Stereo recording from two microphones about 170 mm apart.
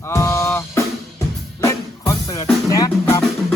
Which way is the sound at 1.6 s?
20° left (ahead or behind).